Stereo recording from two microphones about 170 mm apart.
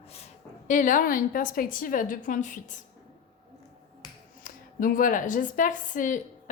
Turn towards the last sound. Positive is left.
turn(degrees=50)  # may be behind; listen again after turning